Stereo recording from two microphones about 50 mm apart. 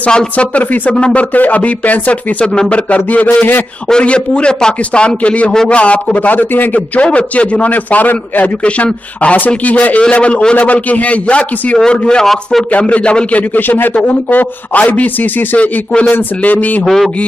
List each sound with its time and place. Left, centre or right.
0.0 s a man's voice: left
1.3 s a man's voice: left
7.0 s a man's voice: left
8.6 s a man's voice: left
13.6 s a man's voice: left
16.8 s a sound: centre